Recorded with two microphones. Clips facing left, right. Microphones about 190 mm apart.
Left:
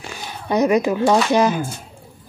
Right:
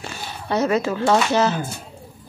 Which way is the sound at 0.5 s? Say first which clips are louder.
Left 4 dB; 15° left (ahead or behind).